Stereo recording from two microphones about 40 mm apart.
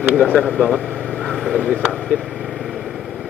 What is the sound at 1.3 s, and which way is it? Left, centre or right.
Vehicle, centre.